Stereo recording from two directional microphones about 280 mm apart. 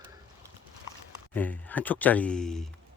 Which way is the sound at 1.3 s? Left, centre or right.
Centre.